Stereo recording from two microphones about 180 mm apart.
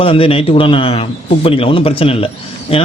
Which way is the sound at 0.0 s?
30° left (ahead or behind).